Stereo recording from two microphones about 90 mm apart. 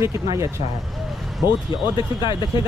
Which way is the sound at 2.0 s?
60° left (ahead or behind).